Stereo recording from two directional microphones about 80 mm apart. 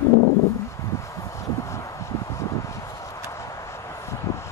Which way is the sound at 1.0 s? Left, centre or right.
Left.